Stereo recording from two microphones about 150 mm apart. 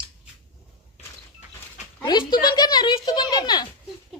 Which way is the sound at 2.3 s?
25° left (ahead or behind).